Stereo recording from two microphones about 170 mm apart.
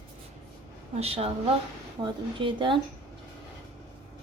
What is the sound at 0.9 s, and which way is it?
Speech, 35° right (ahead or behind).